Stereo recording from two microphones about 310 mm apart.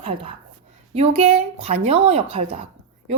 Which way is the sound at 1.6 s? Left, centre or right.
Centre.